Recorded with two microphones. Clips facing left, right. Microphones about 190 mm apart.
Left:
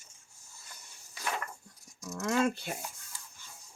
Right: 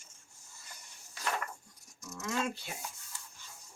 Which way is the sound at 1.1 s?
10° left (ahead or behind).